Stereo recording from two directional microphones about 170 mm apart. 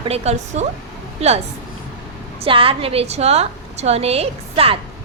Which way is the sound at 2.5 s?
30° right (ahead or behind).